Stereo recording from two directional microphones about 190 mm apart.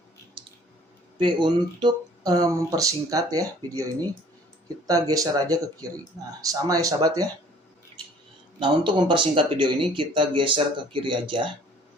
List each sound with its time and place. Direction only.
1.2 s speech: 25° right (ahead or behind)
4.9 s speech: 20° right (ahead or behind)
8.5 s speech: 25° right (ahead or behind)